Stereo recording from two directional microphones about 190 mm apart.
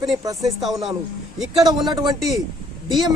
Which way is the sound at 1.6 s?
25° right (ahead or behind).